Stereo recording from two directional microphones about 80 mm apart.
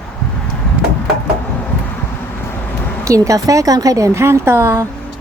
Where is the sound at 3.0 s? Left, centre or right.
Right.